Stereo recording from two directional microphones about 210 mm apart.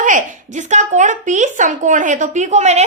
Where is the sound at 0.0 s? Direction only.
35° right (ahead or behind).